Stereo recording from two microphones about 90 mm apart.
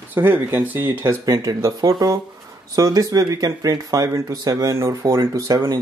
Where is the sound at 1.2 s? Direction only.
40° right (ahead or behind).